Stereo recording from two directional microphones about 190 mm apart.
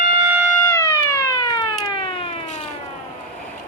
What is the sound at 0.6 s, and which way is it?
Cat, 15° left (ahead or behind).